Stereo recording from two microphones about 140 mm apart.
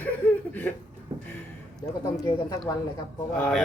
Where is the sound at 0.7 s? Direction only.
15° left (ahead or behind).